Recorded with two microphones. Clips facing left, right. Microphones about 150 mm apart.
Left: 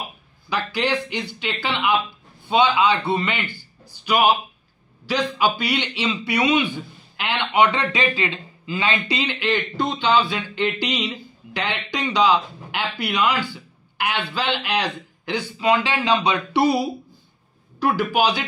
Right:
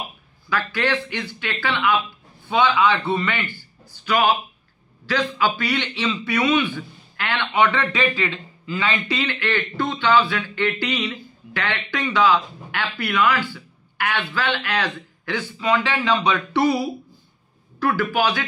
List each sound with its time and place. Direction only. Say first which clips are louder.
0.5 s a man's voice: even; 15° left (ahead or behind)